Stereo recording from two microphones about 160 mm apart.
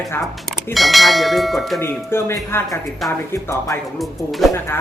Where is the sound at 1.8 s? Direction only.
15° left (ahead or behind).